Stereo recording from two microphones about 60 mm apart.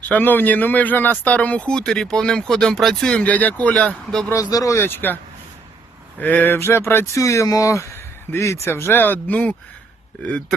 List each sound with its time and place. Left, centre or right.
0.0 s speech: left; by 4.3 s centre
4.7 s speech: left
7.2 s speech: left